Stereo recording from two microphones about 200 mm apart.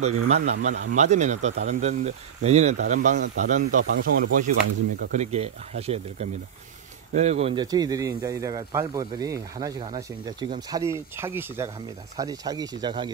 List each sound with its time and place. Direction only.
0.0 s speech: 35° right (ahead or behind)
1.5 s speech: 55° right (ahead or behind)
1.8 s speech: 35° right (ahead or behind)
5.1 s speech: 35° right (ahead or behind)
7.6 s speech: 20° right (ahead or behind)